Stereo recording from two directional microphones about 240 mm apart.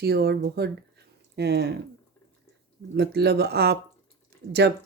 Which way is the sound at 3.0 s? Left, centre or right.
Right.